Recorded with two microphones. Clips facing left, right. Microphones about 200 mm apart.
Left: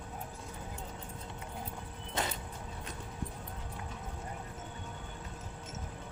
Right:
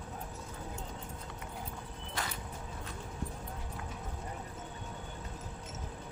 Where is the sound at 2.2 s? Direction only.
20° left (ahead or behind).